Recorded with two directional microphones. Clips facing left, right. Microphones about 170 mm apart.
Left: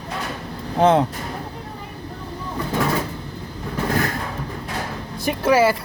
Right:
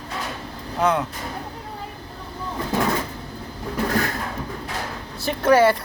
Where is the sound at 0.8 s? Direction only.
30° left (ahead or behind).